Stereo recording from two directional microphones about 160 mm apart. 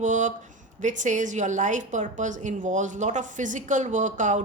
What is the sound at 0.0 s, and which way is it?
A woman's voice, 50° right (ahead or behind).